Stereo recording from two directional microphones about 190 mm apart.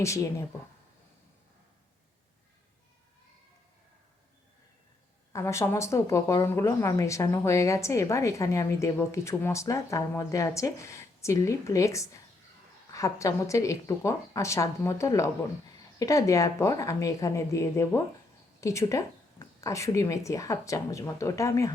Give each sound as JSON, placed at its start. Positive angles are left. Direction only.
{"t": 0.0, "sound": "speech", "side_deg": 15}
{"t": 5.3, "sound": "speech", "side_deg": 15}